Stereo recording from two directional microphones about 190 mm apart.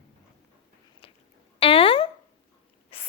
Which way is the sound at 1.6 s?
30° left (ahead or behind).